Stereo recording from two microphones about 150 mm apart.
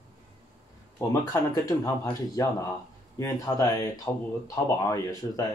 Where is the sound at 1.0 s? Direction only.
20° left (ahead or behind).